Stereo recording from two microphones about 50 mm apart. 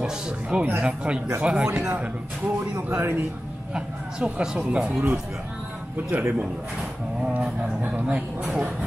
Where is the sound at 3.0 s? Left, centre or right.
Right.